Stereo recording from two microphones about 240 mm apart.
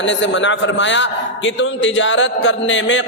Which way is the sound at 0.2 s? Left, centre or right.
Left.